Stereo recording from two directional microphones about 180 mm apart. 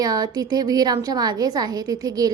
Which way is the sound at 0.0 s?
20° right (ahead or behind).